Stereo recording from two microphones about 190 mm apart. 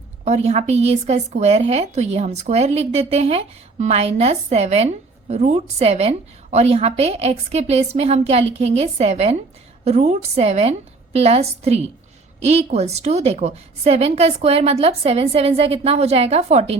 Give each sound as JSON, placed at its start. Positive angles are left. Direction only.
{"t": 0.3, "sound": "a woman's voice", "side_deg": -35}